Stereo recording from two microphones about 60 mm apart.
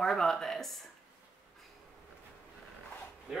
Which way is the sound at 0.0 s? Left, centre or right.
Centre.